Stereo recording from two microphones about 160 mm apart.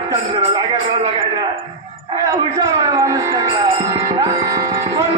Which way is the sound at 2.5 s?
20° right (ahead or behind).